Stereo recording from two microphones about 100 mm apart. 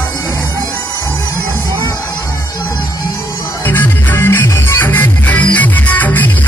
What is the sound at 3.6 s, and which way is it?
Music, 25° left (ahead or behind).